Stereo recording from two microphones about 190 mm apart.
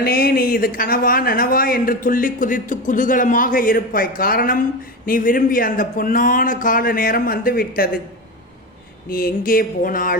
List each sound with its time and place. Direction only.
0.0 s speech: 50° left (ahead or behind)
9.0 s speech: 50° left (ahead or behind)